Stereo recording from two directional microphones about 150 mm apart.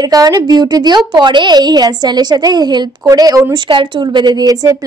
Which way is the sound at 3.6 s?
35° right (ahead or behind).